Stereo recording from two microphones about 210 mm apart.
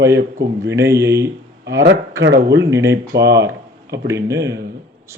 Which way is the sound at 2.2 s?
50° right (ahead or behind).